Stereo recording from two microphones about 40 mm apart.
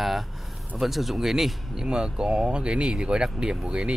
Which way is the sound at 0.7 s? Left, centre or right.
Centre.